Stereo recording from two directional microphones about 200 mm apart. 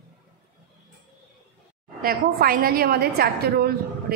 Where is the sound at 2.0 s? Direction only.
45° right (ahead or behind).